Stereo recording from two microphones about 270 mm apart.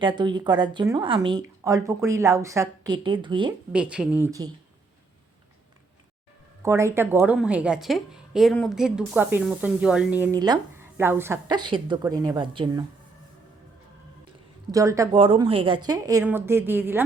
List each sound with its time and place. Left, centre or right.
0.0 s a woman's voice: centre
3.7 s speech: centre
6.6 s a woman's voice: centre
14.7 s a woman's voice: centre